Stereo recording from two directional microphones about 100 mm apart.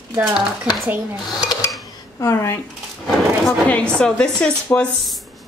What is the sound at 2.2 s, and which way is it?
Speech, 30° left (ahead or behind).